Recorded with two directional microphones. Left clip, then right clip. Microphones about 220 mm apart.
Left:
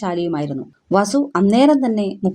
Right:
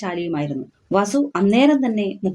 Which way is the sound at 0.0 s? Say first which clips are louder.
Left 3 dB; 40° left (ahead or behind).